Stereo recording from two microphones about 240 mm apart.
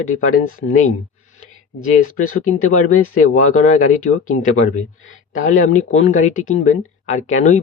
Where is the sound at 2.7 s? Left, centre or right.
Left.